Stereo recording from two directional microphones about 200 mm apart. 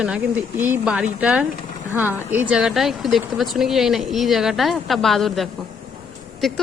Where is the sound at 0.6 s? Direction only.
5° right (ahead or behind).